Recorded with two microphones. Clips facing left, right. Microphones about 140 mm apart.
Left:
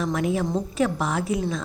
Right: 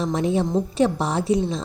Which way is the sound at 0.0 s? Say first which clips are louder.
Right 2 dB; 30° right (ahead or behind).